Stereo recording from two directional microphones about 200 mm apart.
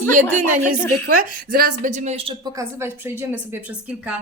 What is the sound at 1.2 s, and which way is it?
A woman's voice, 45° right (ahead or behind).